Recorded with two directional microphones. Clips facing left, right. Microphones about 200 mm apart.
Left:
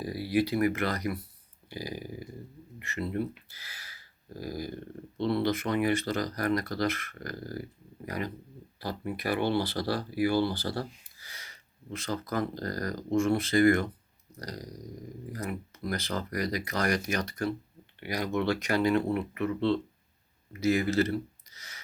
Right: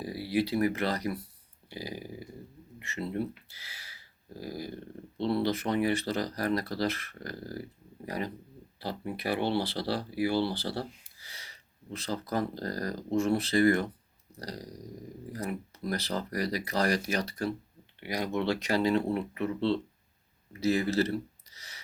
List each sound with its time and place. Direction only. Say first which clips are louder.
0.1 s speech: left 2 dB; 30° right (ahead or behind)
11.9 s speech: even; 30° right (ahead or behind)
21.5 s a sound: left 1 dB; 30° right (ahead or behind)